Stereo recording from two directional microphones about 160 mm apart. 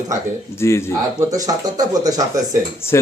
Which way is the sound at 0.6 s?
15° left (ahead or behind).